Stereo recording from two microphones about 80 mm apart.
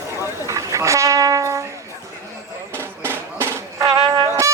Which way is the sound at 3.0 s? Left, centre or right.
Right.